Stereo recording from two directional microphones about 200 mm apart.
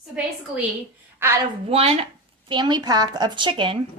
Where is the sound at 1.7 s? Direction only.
30° right (ahead or behind).